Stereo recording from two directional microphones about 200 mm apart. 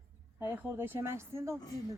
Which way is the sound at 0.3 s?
10° right (ahead or behind).